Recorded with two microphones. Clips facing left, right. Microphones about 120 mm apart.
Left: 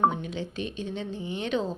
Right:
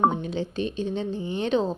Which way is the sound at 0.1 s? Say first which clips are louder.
Right 4 dB; 30° right (ahead or behind).